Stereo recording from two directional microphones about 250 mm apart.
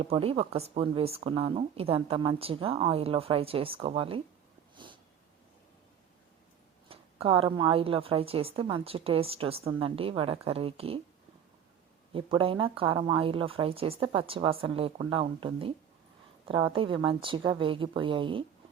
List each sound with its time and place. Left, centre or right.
0.0 s speech: right
6.8 s speech: right
12.1 s speech: right